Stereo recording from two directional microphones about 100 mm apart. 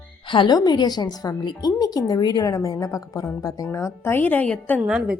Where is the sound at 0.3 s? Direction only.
55° left (ahead or behind).